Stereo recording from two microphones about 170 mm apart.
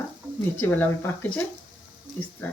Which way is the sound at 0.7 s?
10° left (ahead or behind).